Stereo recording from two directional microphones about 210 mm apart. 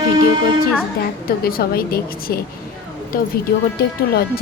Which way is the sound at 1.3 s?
45° left (ahead or behind).